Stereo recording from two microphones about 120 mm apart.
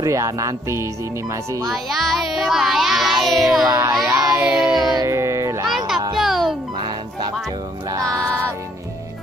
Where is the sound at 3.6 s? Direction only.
20° right (ahead or behind).